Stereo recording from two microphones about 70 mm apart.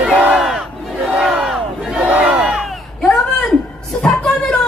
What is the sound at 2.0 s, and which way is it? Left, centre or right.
Battle cry, right.